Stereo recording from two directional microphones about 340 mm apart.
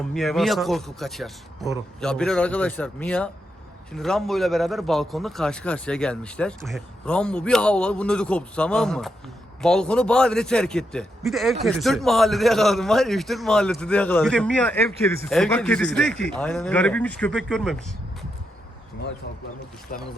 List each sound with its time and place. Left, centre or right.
0.0 s speech: centre
19.9 s speech: left